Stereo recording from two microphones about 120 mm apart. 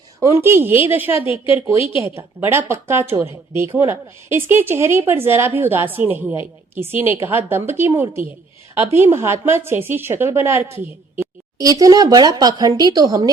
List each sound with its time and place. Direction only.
0.2 s a woman's voice: 25° right (ahead or behind)